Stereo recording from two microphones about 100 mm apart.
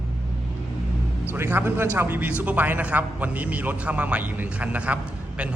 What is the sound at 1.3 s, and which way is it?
A man's voice, 20° right (ahead or behind).